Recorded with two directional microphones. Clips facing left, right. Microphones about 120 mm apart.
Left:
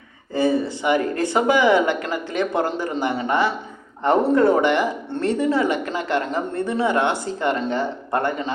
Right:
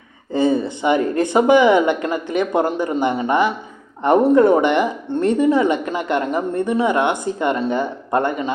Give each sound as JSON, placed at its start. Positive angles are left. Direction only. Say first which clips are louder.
{"t": 0.3, "sound": "a woman's voice", "louder": "right 2 dB", "side_deg": -20}